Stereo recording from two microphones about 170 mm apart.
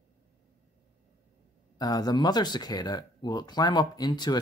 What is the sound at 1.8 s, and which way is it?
Speech, 25° left (ahead or behind).